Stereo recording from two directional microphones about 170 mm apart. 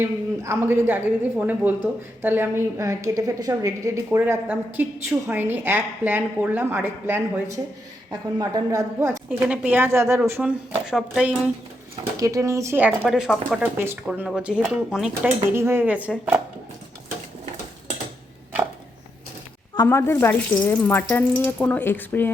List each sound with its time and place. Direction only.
0.0 s speech: 15° right (ahead or behind)
12.1 s speech: 20° right (ahead or behind)
13.1 s speech: 5° right (ahead or behind)
15.5 s speech: 15° right (ahead or behind)
19.7 s speech: 20° left (ahead or behind)